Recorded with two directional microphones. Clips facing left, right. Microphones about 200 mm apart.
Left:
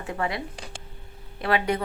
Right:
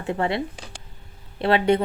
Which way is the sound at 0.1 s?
25° right (ahead or behind).